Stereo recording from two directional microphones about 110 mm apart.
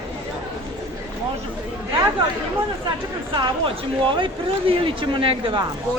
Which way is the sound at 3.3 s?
45° right (ahead or behind).